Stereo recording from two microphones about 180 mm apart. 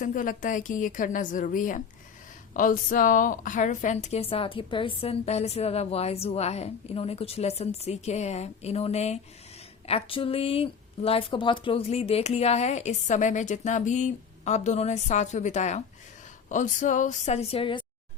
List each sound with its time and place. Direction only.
0.0 s a woman's voice: 45° left (ahead or behind); by 17.8 s 30° left (ahead or behind)